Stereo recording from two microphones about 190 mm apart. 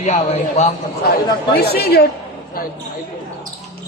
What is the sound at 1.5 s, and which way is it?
Speech, 55° left (ahead or behind).